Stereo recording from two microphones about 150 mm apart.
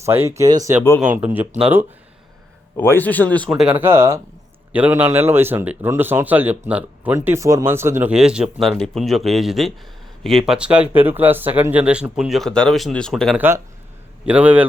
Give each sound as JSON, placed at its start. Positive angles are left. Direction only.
{"t": 0.0, "sound": "speech", "side_deg": -15}
{"t": 1.0, "sound": "speech", "side_deg": -10}
{"t": 2.7, "sound": "speech", "side_deg": 15}
{"t": 3.5, "sound": "speech", "side_deg": -5}
{"t": 8.1, "sound": "speech", "side_deg": -5}
{"t": 13.3, "sound": "speech", "side_deg": -15}